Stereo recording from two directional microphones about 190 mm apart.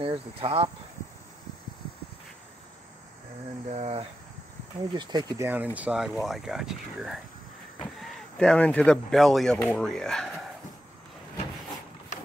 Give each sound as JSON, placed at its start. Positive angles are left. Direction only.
{"t": 0.0, "sound": "speech", "side_deg": -30}
{"t": 3.7, "sound": "speech", "side_deg": -35}
{"t": 4.9, "sound": "speech", "side_deg": -20}
{"t": 5.5, "sound": "speech", "side_deg": -10}